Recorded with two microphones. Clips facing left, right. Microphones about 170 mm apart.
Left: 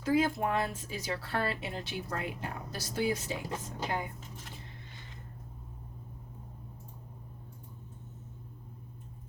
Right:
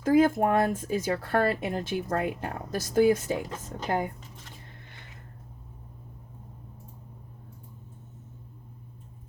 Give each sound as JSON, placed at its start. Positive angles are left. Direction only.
{"t": 0.0, "sound": "speech", "side_deg": -45}